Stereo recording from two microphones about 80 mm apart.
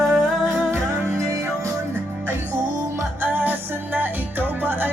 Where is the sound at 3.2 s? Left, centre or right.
Right.